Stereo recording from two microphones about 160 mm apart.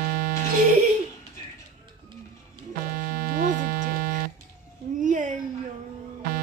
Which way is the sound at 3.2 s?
55° right (ahead or behind).